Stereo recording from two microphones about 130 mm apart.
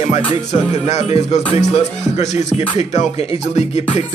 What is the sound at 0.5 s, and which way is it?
Speech, 60° left (ahead or behind).